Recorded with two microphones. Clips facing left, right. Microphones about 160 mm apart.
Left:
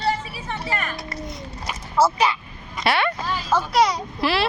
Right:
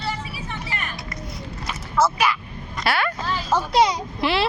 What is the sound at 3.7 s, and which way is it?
Speech, 25° right (ahead or behind).